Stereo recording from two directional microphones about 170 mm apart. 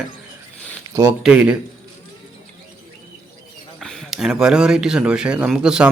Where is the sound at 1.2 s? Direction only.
5° right (ahead or behind).